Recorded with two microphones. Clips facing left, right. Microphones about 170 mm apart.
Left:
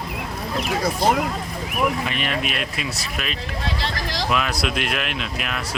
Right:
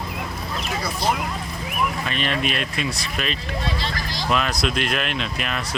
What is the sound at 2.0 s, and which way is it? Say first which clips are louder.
Speech: right 1 dB; 10° left (ahead or behind).